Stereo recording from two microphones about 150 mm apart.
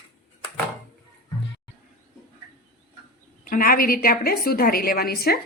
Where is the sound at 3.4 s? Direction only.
75° left (ahead or behind); by 5.4 s 90° left.